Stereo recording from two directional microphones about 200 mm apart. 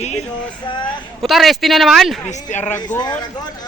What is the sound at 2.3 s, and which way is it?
Speech, 35° left (ahead or behind).